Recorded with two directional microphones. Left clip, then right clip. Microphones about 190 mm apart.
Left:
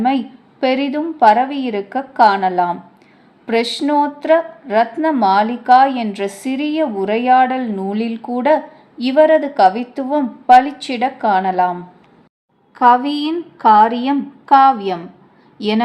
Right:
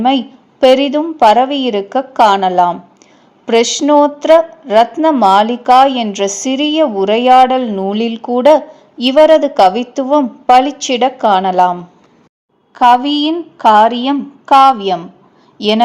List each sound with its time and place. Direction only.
0.0 s a woman's voice: 30° right (ahead or behind)